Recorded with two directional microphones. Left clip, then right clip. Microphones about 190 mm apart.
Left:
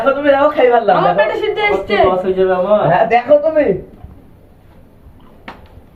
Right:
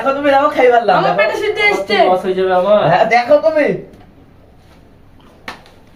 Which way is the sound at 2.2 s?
30° right (ahead or behind).